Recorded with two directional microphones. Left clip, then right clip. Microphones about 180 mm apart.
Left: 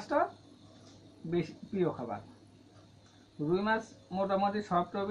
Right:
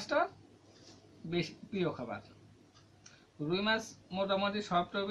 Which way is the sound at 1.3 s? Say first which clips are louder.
Left 2 dB; centre (ahead or behind).